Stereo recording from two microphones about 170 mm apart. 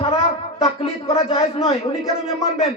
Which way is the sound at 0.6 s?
35° left (ahead or behind).